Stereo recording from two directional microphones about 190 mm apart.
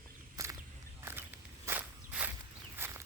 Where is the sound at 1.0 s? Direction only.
10° right (ahead or behind).